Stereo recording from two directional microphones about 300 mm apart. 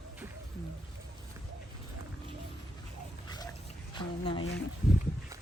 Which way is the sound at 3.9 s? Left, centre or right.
Centre.